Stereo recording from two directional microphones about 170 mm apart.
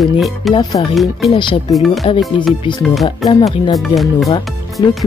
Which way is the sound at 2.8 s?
Centre (ahead or behind).